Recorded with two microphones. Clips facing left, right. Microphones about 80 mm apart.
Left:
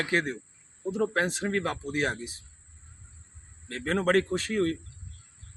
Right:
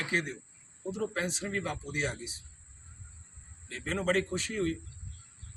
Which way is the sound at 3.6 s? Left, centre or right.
Left.